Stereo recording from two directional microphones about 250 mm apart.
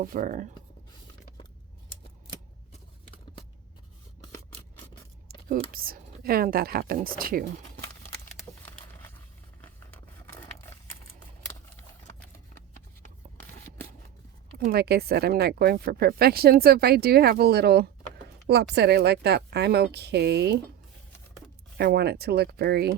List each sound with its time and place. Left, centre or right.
0.0 s speech: right
5.7 s speech: right
8.6 s a sound: centre
14.6 s speech: right
21.8 s speech: right